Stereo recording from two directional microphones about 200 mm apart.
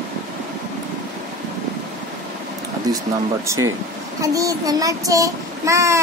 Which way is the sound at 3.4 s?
15° right (ahead or behind).